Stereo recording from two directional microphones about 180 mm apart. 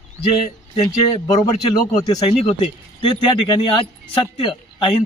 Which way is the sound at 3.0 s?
25° left (ahead or behind).